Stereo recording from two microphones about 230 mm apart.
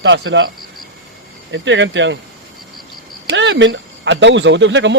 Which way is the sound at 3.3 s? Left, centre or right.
Right.